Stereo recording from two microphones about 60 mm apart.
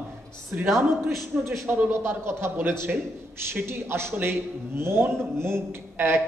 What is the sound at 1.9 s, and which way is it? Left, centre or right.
A man's voice, right.